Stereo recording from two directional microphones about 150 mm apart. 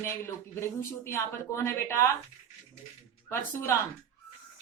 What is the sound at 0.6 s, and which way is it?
Speech, 15° left (ahead or behind).